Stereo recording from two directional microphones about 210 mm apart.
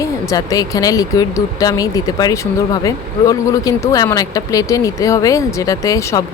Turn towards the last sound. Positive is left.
turn(degrees=15)  # may be behind; listen again after turning